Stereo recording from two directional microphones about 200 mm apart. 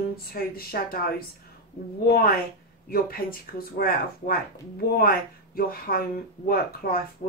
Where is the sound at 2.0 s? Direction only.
50° left (ahead or behind).